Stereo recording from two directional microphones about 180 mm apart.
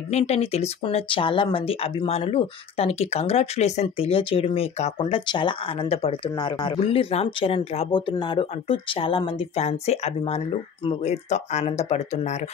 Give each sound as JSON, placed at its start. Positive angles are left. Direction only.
{"t": 0.1, "sound": "speech", "side_deg": 35}